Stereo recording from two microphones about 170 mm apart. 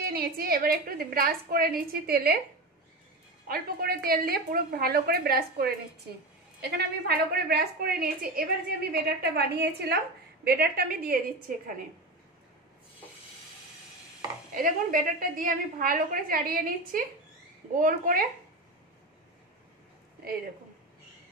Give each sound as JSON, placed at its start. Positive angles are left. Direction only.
{"t": 0.0, "sound": "a woman's voice", "side_deg": -60}
{"t": 3.4, "sound": "a woman's voice", "side_deg": -60}
{"t": 14.5, "sound": "a woman's voice", "side_deg": -50}